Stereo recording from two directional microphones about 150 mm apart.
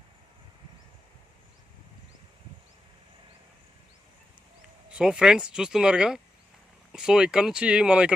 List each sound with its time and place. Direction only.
4.9 s speech: 5° right (ahead or behind)